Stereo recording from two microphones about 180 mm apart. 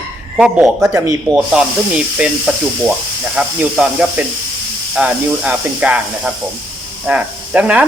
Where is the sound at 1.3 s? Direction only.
5° right (ahead or behind).